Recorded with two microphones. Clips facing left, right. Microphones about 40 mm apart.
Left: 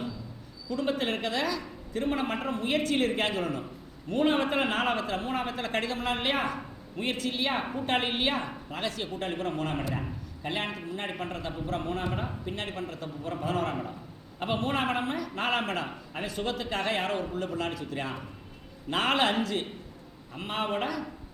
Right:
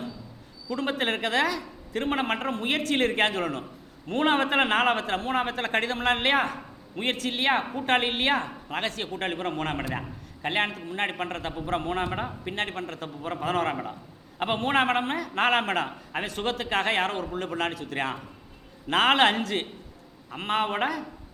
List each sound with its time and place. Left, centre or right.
0.7 s a man's voice: right
14.3 s a man's voice: right